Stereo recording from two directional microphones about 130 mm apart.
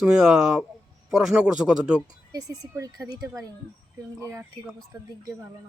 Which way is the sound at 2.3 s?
25° right (ahead or behind).